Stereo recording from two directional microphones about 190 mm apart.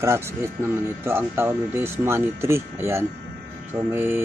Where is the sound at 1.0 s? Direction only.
10° right (ahead or behind).